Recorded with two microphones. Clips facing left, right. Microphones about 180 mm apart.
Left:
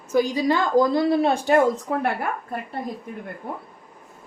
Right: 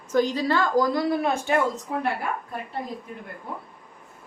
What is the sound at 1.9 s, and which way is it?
Speech, 60° left (ahead or behind).